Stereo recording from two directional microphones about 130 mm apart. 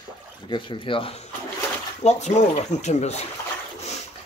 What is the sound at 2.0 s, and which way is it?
Speech, 60° left (ahead or behind).